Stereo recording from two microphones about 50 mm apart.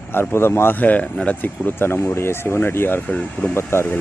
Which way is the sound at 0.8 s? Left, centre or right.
Left.